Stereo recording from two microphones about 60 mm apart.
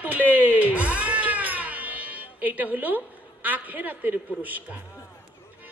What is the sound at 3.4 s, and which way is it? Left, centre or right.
A man's voice, right.